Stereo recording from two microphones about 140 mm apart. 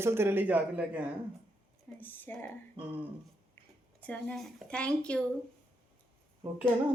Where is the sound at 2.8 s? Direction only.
40° right (ahead or behind).